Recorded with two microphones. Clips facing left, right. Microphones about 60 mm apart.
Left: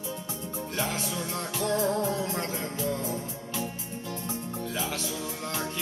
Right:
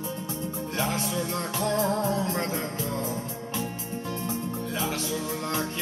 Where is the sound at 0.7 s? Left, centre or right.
Right.